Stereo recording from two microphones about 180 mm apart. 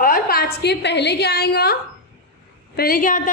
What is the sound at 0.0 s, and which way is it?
A woman's voice, 55° left (ahead or behind).